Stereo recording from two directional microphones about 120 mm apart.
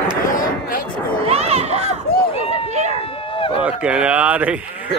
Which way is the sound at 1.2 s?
60° right (ahead or behind).